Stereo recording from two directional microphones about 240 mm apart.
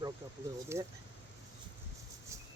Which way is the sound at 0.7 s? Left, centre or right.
Centre.